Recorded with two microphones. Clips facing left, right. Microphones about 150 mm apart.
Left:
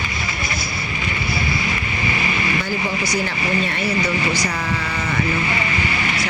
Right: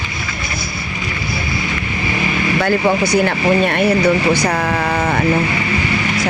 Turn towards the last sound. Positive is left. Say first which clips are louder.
# right 7 dB
turn(degrees=-50)  # may be behind; listen again after turning